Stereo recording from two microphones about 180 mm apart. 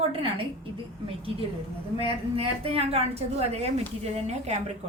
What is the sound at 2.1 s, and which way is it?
A woman's voice, 30° right (ahead or behind).